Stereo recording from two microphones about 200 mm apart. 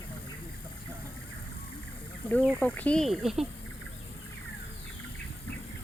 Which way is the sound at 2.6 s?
10° left (ahead or behind).